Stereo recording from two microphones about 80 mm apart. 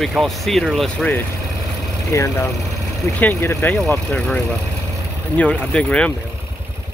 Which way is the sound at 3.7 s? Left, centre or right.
Centre.